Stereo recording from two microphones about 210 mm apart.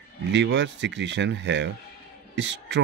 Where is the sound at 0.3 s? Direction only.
55° right (ahead or behind).